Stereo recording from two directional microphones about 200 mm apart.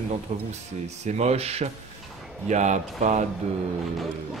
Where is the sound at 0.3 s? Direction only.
35° right (ahead or behind).